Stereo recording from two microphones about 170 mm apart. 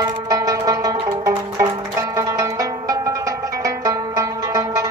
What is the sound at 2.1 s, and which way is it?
Music, 20° right (ahead or behind).